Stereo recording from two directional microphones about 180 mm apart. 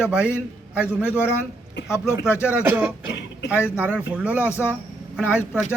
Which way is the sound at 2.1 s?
15° left (ahead or behind).